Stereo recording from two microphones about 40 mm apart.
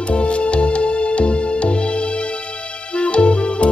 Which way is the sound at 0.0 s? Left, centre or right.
Left.